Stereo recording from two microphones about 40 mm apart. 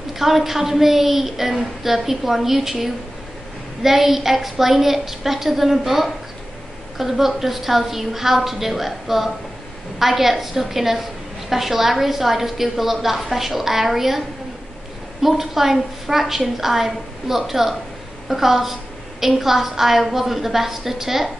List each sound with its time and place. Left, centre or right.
0.2 s a woman's voice: centre
15.2 s a woman's voice: centre